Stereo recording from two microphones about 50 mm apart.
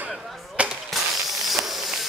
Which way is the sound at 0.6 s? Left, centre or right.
Right.